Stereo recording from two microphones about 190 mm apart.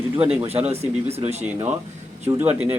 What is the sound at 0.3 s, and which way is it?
Speech, 30° right (ahead or behind).